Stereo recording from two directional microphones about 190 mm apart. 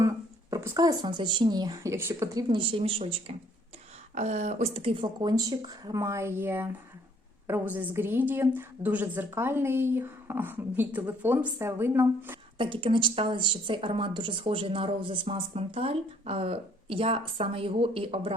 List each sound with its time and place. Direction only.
0.5 s a woman's voice: 20° right (ahead or behind)
12.5 s speech: 25° right (ahead or behind)